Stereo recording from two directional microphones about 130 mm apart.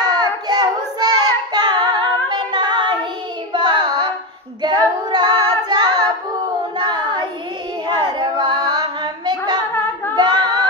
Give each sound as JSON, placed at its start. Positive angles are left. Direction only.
{"t": 0.0, "sound": "child singing", "side_deg": -30}
{"t": 5.1, "sound": "child singing", "side_deg": -35}
{"t": 5.7, "sound": "singing", "side_deg": -35}
{"t": 6.8, "sound": "child singing", "side_deg": -35}
{"t": 10.1, "sound": "singing", "side_deg": -35}